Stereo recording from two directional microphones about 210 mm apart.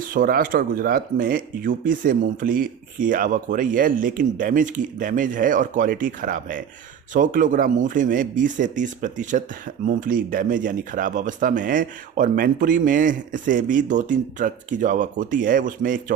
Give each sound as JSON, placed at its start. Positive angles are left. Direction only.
{"t": 0.1, "sound": "speech", "side_deg": -45}